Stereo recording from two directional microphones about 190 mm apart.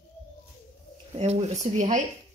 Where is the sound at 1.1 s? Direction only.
35° right (ahead or behind).